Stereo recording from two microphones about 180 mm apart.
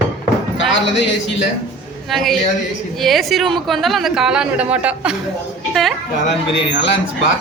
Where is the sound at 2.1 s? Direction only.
Centre (ahead or behind).